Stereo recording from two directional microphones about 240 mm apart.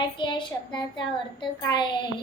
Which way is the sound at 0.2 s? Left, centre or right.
Centre.